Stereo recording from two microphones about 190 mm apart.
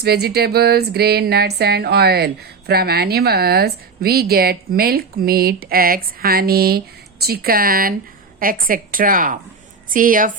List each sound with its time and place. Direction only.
0.0 s music: 55° right (ahead or behind)
8.4 s a woman's voice: 50° right (ahead or behind)